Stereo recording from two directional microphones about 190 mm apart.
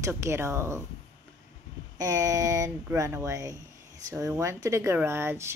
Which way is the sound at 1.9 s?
20° right (ahead or behind).